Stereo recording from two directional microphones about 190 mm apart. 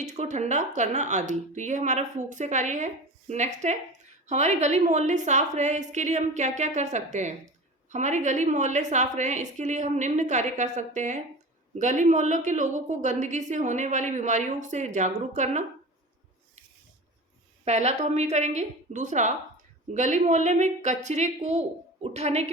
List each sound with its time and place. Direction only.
0.0 s a woman's voice: 40° right (ahead or behind)
17.7 s a woman's voice: 35° right (ahead or behind)